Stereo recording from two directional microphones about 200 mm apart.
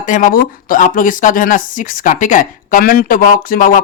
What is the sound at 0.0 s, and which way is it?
Speech, 40° left (ahead or behind).